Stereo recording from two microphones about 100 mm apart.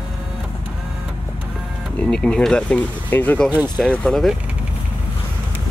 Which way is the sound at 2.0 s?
10° left (ahead or behind).